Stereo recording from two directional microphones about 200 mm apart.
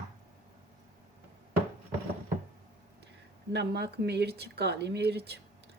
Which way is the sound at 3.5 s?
55° right (ahead or behind).